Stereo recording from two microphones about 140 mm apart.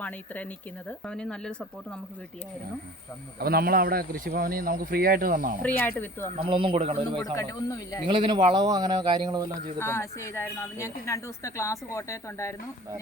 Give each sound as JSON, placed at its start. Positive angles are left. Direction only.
{"t": 0.0, "sound": "speech", "side_deg": 10}
{"t": 3.3, "sound": "speech", "side_deg": -90}
{"t": 5.6, "sound": "speech", "side_deg": 15}
{"t": 6.3, "sound": "a man's voice", "side_deg": -40}
{"t": 7.3, "sound": "a woman's voice", "side_deg": 25}
{"t": 8.0, "sound": "a man's voice", "side_deg": -35}
{"t": 9.7, "sound": "a woman's voice", "side_deg": 20}